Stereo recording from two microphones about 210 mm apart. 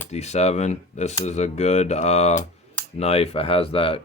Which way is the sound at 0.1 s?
30° left (ahead or behind).